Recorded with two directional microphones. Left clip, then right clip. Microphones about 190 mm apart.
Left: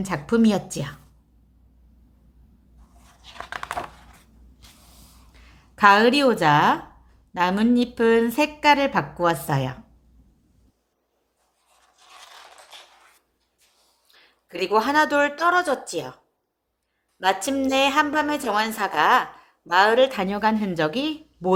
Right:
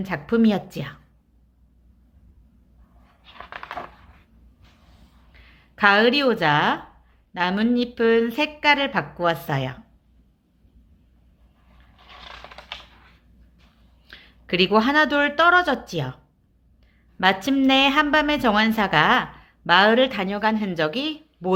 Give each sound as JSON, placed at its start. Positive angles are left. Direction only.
{"t": 0.0, "sound": "a woman's voice", "side_deg": 0}
{"t": 5.3, "sound": "speech", "side_deg": 5}
{"t": 14.2, "sound": "a woman's voice", "side_deg": 5}